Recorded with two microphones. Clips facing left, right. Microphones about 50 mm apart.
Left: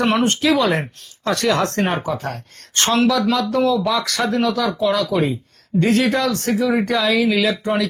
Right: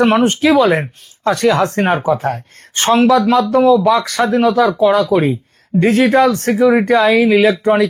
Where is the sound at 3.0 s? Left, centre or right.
Right.